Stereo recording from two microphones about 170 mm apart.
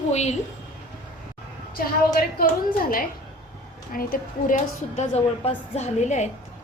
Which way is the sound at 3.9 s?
55° left (ahead or behind).